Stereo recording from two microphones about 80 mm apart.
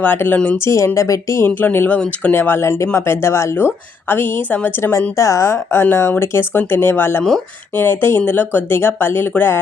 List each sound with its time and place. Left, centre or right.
0.0 s speech: left
0.6 s a woman's voice: left
1.5 s a woman's voice: left